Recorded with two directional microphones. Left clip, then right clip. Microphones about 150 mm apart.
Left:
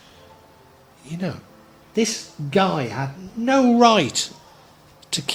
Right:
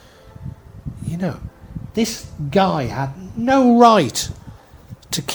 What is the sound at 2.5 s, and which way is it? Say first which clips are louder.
Speech: right 3 dB; 40° right (ahead or behind).